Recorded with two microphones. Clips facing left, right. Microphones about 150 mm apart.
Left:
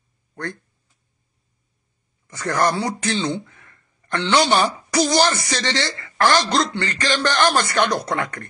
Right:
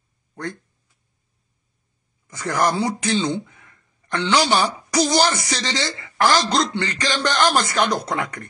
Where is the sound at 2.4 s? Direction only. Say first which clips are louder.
Even; 15° right (ahead or behind).